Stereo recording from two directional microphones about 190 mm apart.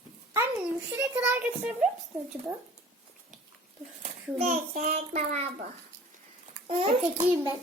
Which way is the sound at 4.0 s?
35° right (ahead or behind).